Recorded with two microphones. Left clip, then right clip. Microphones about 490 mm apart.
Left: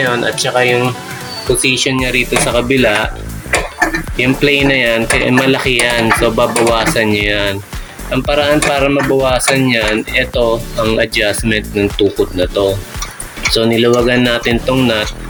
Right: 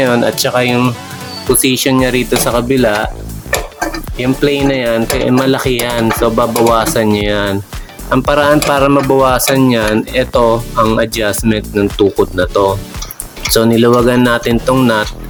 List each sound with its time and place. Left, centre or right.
0.0 s speech: right
4.2 s speech: right